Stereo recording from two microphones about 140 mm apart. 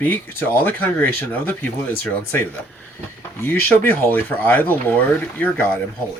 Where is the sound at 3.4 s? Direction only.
15° left (ahead or behind).